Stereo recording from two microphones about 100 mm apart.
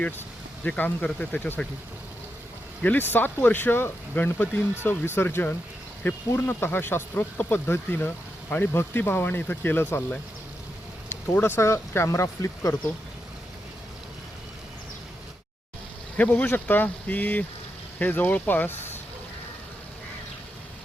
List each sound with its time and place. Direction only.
0.0 s speech: 15° left (ahead or behind)
2.8 s speech: 20° left (ahead or behind)
11.3 s speech: 20° left (ahead or behind)
16.1 s speech: 15° left (ahead or behind)